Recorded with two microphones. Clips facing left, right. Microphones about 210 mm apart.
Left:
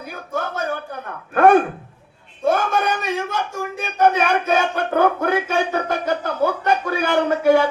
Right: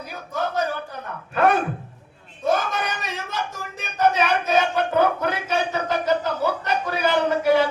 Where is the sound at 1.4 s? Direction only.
50° left (ahead or behind).